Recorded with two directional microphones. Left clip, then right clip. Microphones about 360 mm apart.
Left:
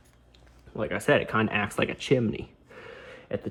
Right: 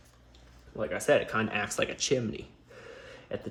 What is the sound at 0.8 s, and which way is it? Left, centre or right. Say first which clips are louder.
Speech: left 2 dB; centre.